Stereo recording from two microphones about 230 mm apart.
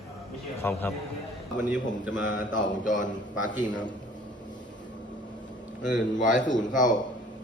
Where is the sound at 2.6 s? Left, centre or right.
Left.